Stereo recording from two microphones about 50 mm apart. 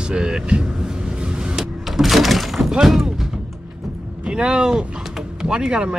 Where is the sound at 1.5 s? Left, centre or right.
Centre.